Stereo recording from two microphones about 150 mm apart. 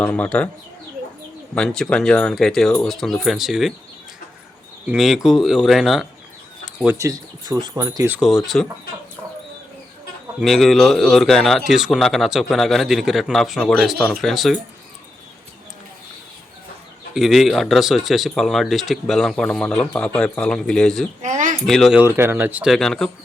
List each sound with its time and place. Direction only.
0.0 s speech: 10° left (ahead or behind)
1.5 s speech: 5° left (ahead or behind)
4.9 s speech: centre (ahead or behind)
6.9 s speech: 20° right (ahead or behind)
8.1 s speech: 5° right (ahead or behind)
10.4 s speech: centre (ahead or behind)
17.2 s speech: centre (ahead or behind)
21.2 s speech: 55° right (ahead or behind)
21.7 s speech: centre (ahead or behind)
21.9 s speech: 15° right (ahead or behind); by 23.1 s 5° left (ahead or behind)